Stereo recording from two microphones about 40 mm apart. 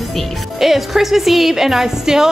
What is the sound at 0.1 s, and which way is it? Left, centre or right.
Speech, centre.